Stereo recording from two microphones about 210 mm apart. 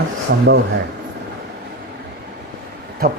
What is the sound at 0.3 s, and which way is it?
Speech, 45° right (ahead or behind).